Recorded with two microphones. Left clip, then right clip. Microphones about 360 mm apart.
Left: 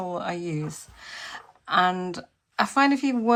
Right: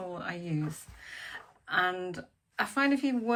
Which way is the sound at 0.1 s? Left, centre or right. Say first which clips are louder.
Left 8 dB; centre.